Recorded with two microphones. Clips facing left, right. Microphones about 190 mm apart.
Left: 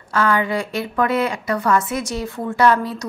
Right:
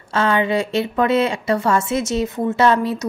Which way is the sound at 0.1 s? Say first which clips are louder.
Right 1 dB; 25° right (ahead or behind).